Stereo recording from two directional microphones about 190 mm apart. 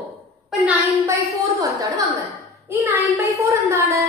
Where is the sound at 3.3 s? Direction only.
15° right (ahead or behind).